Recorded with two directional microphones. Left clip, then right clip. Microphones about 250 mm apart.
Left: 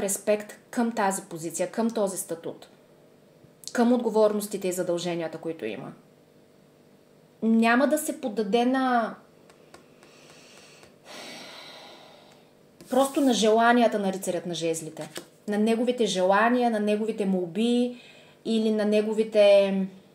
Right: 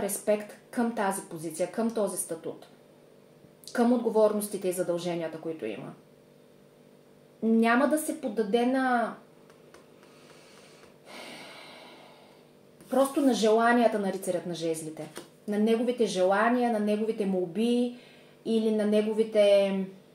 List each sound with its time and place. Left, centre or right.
0.0 s a woman's voice: left
3.7 s a woman's voice: left
7.5 s speech: left
12.9 s a woman's voice: left